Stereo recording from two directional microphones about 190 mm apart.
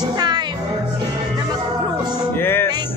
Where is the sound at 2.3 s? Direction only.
10° left (ahead or behind).